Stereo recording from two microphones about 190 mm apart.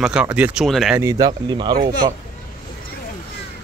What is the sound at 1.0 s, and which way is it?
Speech, 20° right (ahead or behind).